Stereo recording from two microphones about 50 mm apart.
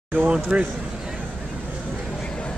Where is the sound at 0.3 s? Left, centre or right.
Right.